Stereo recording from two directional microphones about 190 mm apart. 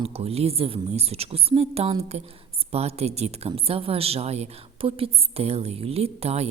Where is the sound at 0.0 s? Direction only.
30° right (ahead or behind).